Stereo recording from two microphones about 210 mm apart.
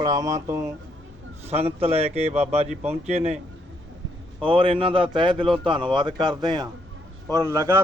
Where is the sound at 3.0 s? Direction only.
30° right (ahead or behind).